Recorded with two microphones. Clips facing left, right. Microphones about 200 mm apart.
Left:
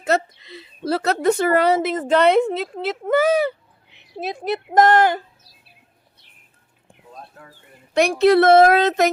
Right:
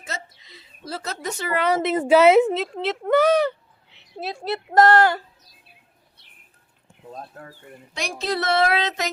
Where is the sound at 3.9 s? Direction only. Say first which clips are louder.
Left 3 dB; 15° left (ahead or behind).